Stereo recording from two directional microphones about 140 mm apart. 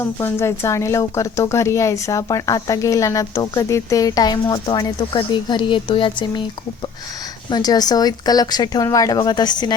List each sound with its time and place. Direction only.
0.0 s speech: 20° left (ahead or behind); by 6.4 s 35° left (ahead or behind)
7.5 s speech: 30° left (ahead or behind)